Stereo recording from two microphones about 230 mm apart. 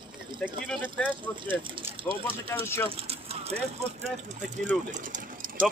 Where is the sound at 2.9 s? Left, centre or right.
Right.